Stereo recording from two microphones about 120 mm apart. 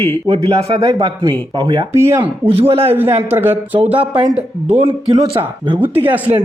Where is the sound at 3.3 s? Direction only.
15° right (ahead or behind).